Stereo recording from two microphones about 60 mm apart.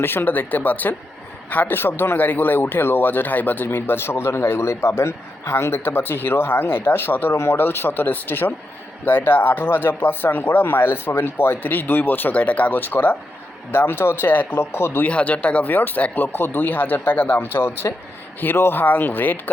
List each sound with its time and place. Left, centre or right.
0.0 s a man's voice: left
15.0 s speech: left
16.2 s a man's voice: left